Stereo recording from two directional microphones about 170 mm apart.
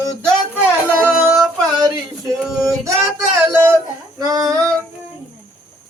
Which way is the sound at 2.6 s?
15° right (ahead or behind).